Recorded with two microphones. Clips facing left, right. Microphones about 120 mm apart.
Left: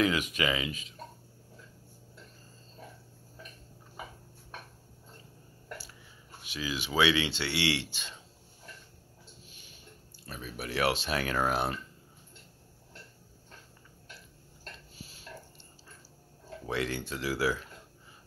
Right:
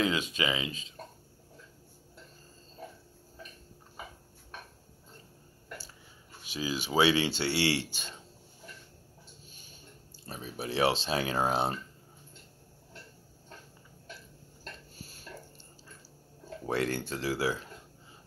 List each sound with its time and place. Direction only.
0.0 s speech: 25° right (ahead or behind)
6.5 s speech: 35° right (ahead or behind)
10.2 s speech: 30° right (ahead or behind)
15.0 s dog: 45° right (ahead or behind)
16.6 s speech: 45° right (ahead or behind)
17.1 s speech: 30° right (ahead or behind)